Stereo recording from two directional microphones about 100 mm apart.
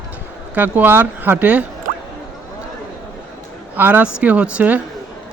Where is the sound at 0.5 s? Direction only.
20° right (ahead or behind).